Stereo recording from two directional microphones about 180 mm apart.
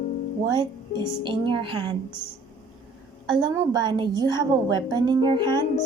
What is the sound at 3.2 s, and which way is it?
A woman's voice, 25° right (ahead or behind).